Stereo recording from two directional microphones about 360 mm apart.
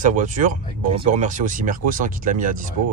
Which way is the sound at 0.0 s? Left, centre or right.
Right.